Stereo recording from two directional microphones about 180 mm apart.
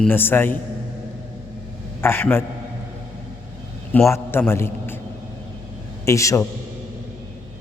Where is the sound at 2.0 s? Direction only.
10° left (ahead or behind).